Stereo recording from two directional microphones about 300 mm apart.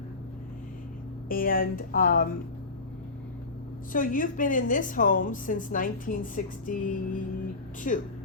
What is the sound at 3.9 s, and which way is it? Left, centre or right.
A woman's voice, left.